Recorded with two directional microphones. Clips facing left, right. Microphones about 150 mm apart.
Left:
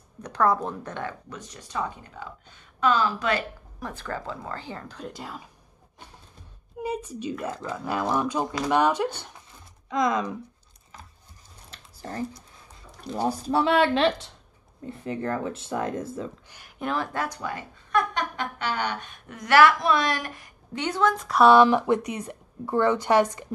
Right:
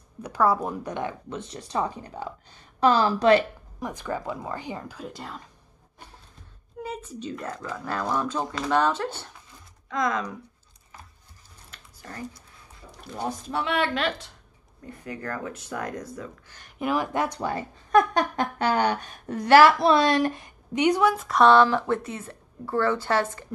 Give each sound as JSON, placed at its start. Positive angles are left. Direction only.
{"t": 0.2, "sound": "speech", "side_deg": -10}
{"t": 1.3, "sound": "speech", "side_deg": -30}
{"t": 3.8, "sound": "speech", "side_deg": -15}
{"t": 6.8, "sound": "a woman's voice", "side_deg": 15}
{"t": 11.7, "sound": "a sound", "side_deg": 30}
{"t": 13.1, "sound": "speech", "side_deg": 35}
{"t": 16.5, "sound": "speech", "side_deg": 0}
{"t": 17.4, "sound": "speech", "side_deg": -30}
{"t": 17.9, "sound": "speech", "side_deg": -45}
{"t": 21.5, "sound": "a woman's voice", "side_deg": 15}